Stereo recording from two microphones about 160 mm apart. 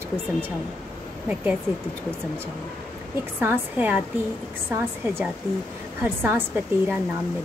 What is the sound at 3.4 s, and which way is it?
A woman's voice, 15° right (ahead or behind).